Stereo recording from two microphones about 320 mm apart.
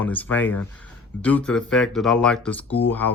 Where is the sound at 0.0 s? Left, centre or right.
Centre.